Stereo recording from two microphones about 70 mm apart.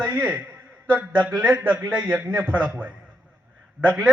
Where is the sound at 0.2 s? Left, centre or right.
Right.